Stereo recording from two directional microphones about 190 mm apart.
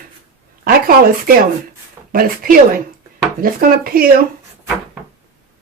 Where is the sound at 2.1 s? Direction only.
50° right (ahead or behind).